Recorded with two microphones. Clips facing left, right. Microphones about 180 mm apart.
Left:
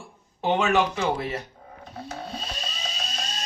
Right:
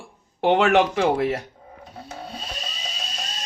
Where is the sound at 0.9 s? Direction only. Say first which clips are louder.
Right 6 dB; 50° right (ahead or behind).